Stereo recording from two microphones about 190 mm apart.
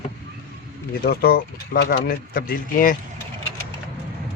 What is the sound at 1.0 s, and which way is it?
Speech, 55° left (ahead or behind).